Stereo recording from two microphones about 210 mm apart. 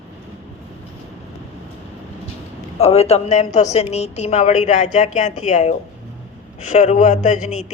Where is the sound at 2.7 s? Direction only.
30° left (ahead or behind).